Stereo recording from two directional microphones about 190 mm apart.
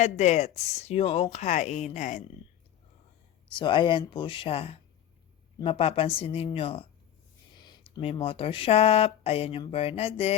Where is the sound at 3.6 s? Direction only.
25° left (ahead or behind).